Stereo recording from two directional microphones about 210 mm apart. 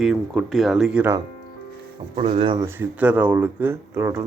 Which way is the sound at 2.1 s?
25° right (ahead or behind).